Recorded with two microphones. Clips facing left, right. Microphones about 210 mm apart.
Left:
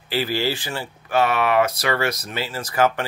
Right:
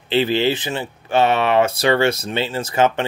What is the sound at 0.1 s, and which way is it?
Speech, 20° right (ahead or behind).